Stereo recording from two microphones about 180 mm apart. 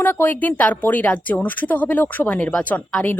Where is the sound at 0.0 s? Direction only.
10° left (ahead or behind).